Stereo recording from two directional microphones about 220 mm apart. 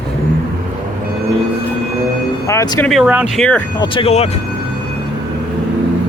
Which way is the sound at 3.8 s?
25° left (ahead or behind).